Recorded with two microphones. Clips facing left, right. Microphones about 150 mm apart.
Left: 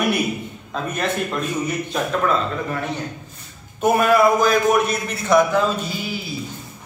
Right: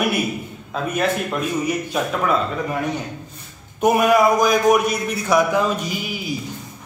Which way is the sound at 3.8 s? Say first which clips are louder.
Even; 15° right (ahead or behind).